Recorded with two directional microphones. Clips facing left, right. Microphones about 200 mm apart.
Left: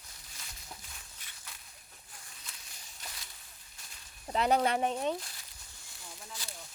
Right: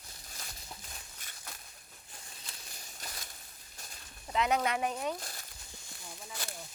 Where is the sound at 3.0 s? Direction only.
40° right (ahead or behind).